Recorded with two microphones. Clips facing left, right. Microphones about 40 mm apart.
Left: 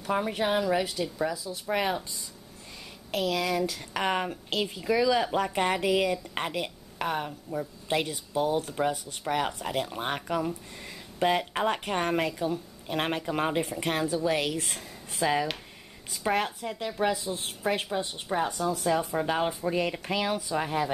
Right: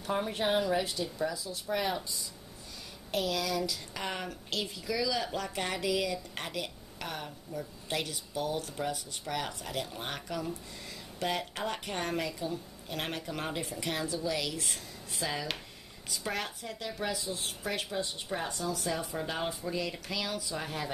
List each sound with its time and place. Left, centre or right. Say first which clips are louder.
0.1 s speech: left 4 dB; left
0.4 s a woman's voice: left 1 dB; centre
0.7 s a woman's voice: left 4 dB; left
3.2 s a woman's voice: left 4 dB; left
13.7 s a woman's voice: left 6 dB; left
14.7 s a woman's voice: left 2 dB; left